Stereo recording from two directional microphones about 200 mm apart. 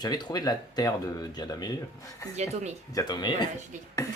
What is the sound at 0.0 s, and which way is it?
Speech, 20° left (ahead or behind).